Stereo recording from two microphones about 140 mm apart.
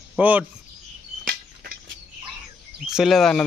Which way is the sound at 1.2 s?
90° right.